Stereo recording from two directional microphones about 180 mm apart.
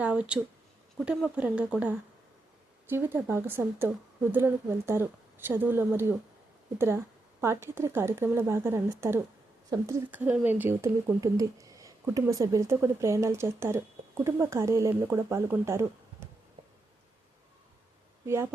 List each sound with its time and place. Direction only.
0.0 s speech: 5° right (ahead or behind)